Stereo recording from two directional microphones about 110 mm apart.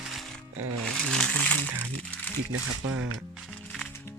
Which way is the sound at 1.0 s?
5° left (ahead or behind).